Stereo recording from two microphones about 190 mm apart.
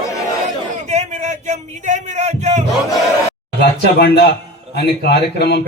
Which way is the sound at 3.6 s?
60° left (ahead or behind).